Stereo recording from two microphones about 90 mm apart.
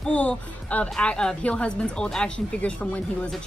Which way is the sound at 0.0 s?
15° left (ahead or behind).